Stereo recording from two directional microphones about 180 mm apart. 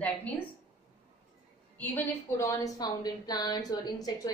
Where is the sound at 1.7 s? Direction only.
10° left (ahead or behind).